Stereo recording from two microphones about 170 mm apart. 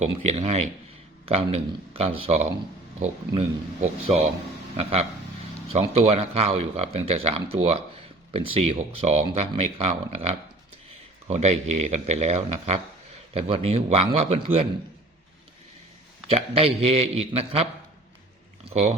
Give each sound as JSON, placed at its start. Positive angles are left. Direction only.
{"t": 0.0, "sound": "speech", "side_deg": -40}
{"t": 11.3, "sound": "speech", "side_deg": -40}
{"t": 16.3, "sound": "speech", "side_deg": -35}
{"t": 18.7, "sound": "speech", "side_deg": -40}